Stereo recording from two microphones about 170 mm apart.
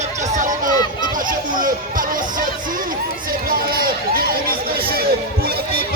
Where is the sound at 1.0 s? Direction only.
50° right (ahead or behind).